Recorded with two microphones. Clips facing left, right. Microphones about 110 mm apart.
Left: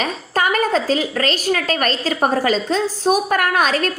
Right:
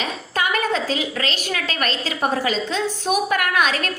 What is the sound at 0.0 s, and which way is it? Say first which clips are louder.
A woman's voice: left 4 dB; 40° left (ahead or behind).